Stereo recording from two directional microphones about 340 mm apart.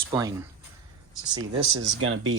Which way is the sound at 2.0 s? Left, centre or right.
Right.